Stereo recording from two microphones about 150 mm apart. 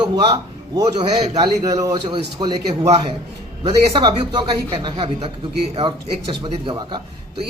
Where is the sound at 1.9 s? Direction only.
35° right (ahead or behind).